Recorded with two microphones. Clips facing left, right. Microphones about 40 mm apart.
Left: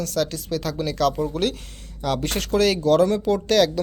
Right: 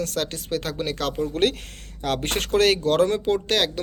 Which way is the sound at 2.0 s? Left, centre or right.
Right.